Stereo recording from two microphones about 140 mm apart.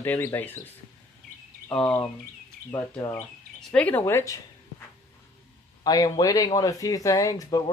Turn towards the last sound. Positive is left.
turn(degrees=25)  # may be behind; listen again after turning